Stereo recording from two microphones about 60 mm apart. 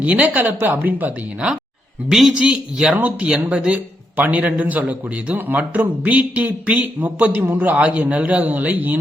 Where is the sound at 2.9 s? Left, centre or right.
Right.